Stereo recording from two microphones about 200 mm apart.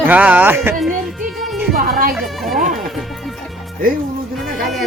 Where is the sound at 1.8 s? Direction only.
45° right (ahead or behind).